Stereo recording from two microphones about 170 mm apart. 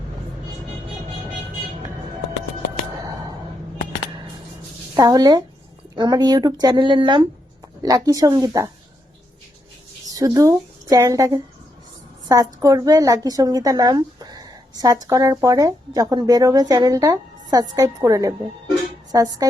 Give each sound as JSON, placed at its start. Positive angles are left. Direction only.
{"t": 3.0, "sound": "a sound", "side_deg": -20}
{"t": 4.9, "sound": "a woman's voice", "side_deg": -20}
{"t": 10.2, "sound": "a woman's voice", "side_deg": -20}